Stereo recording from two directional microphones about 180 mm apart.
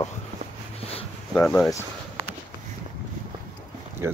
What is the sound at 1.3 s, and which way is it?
Speech, 10° left (ahead or behind).